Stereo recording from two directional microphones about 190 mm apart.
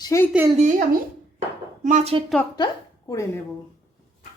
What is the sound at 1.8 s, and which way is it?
Speech, 40° right (ahead or behind).